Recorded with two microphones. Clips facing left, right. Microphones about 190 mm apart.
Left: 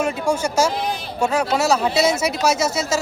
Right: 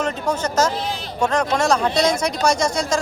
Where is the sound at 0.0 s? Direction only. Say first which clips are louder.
Left 2 dB; 10° left (ahead or behind).